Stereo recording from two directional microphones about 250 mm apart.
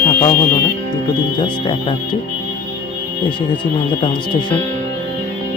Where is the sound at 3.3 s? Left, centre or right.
Centre.